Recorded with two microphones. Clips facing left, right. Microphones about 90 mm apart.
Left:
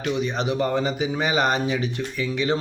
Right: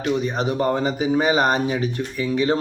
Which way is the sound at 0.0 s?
40° right (ahead or behind).